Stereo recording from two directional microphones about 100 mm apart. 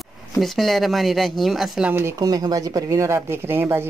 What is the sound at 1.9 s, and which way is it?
Speech, 20° right (ahead or behind).